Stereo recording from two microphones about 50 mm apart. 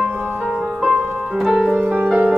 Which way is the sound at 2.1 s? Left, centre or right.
Right.